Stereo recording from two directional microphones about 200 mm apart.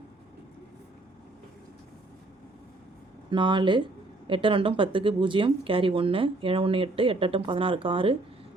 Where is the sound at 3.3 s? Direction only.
25° right (ahead or behind).